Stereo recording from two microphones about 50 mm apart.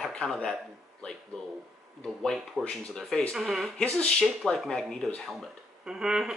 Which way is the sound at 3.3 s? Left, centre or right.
Centre.